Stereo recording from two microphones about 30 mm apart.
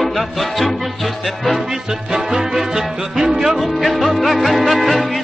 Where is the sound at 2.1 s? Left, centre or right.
Centre.